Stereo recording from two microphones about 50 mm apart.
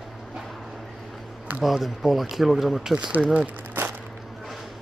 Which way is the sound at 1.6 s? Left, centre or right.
Centre.